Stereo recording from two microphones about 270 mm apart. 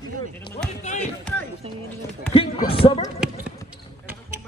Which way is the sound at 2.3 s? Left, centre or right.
Centre.